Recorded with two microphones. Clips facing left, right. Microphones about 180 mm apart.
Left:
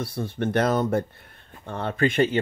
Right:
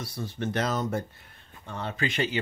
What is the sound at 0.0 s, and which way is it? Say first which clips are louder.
Speech: left 6 dB; 55° left (ahead or behind).